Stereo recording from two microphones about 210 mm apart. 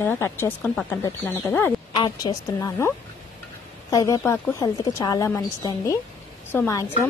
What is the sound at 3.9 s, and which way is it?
Speech, 15° left (ahead or behind).